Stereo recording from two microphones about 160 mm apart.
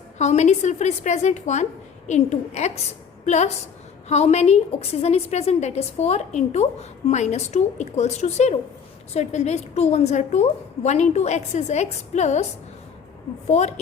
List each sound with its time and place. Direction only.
0.2 s a woman's voice: 45° left (ahead or behind)
13.5 s a woman's voice: 45° left (ahead or behind)